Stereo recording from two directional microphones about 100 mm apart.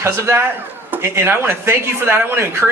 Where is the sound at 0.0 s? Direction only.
25° right (ahead or behind).